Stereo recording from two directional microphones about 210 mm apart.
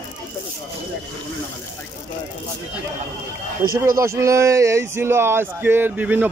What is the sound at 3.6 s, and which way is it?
Speech, 45° right (ahead or behind).